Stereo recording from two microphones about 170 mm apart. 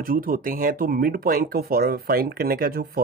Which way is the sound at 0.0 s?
55° right (ahead or behind).